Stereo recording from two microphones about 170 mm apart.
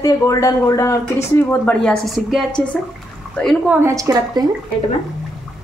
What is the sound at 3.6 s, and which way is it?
Speech, 15° right (ahead or behind).